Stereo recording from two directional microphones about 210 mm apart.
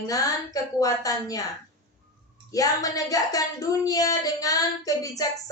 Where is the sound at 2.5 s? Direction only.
15° left (ahead or behind).